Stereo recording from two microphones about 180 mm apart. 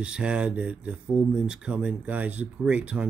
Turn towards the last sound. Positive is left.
turn(degrees=-5)  # may be behind; listen again after turning